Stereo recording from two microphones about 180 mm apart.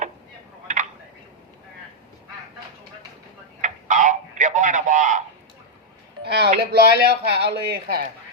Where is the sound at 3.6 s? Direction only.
45° right (ahead or behind).